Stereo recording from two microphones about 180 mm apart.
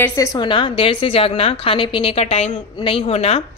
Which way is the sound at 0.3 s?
25° left (ahead or behind).